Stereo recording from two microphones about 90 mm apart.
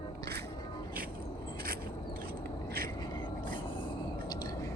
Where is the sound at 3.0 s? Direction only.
60° left (ahead or behind).